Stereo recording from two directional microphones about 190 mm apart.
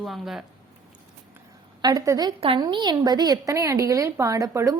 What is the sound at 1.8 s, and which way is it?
A woman's voice, 20° right (ahead or behind).